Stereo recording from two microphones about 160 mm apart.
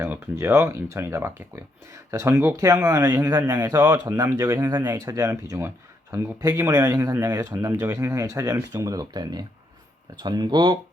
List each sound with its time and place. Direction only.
0.0 s speech: 15° right (ahead or behind)